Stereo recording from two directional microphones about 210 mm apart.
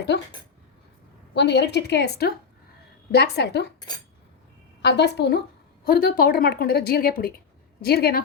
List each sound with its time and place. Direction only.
1.3 s a woman's voice: 55° left (ahead or behind)
4.8 s a woman's voice: 55° left (ahead or behind)